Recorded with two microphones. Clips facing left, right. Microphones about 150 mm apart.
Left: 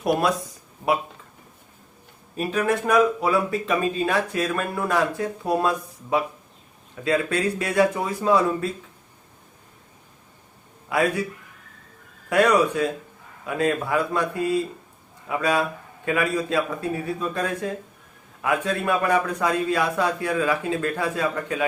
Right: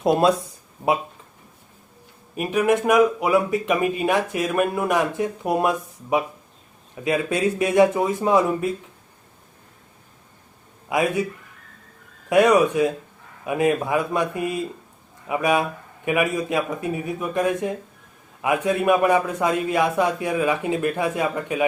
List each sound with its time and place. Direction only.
0.0 s a man's voice: 25° right (ahead or behind)
2.3 s a man's voice: 15° right (ahead or behind)
10.8 s speech: 20° right (ahead or behind)
12.3 s a man's voice: 20° right (ahead or behind)